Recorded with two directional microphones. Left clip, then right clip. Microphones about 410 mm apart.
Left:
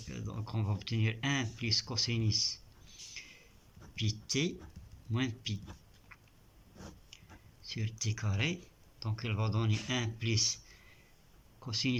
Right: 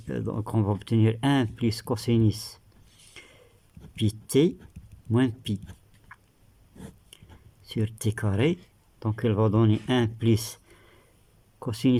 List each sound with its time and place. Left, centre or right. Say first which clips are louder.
0.1 s speech: right 15 dB; centre
4.3 s speech: right 14 dB; centre
7.7 s speech: right 9 dB; centre
11.6 s speech: right 9 dB; centre